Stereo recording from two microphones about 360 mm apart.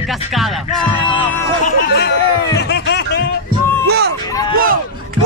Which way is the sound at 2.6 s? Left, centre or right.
Left.